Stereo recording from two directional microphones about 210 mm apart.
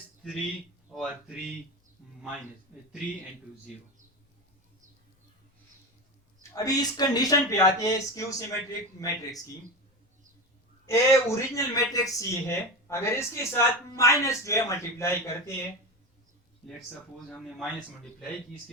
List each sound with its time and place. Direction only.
0.9 s a man's voice: 5° right (ahead or behind)
6.5 s speech: 15° left (ahead or behind)
10.8 s speech: 15° left (ahead or behind)
17.2 s a man's voice: 5° left (ahead or behind)